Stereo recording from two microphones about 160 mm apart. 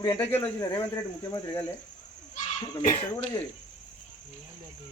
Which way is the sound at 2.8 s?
50° left (ahead or behind).